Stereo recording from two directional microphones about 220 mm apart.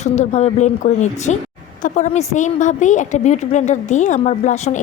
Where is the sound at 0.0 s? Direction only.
30° left (ahead or behind).